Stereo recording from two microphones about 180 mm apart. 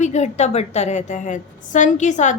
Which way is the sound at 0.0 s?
40° left (ahead or behind).